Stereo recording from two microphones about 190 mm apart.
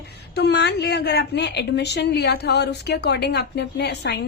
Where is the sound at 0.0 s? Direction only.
60° left (ahead or behind).